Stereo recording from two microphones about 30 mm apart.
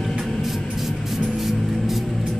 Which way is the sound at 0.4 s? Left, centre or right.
Centre.